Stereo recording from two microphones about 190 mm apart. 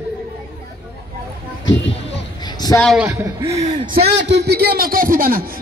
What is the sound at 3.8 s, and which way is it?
A man's voice, 55° right (ahead or behind).